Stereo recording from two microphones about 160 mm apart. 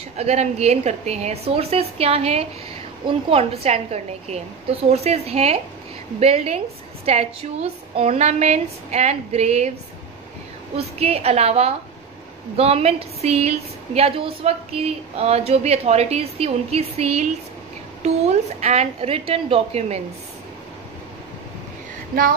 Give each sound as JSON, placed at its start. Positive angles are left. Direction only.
{"t": 0.2, "sound": "a woman's voice", "side_deg": -40}
{"t": 10.8, "sound": "a woman's voice", "side_deg": -40}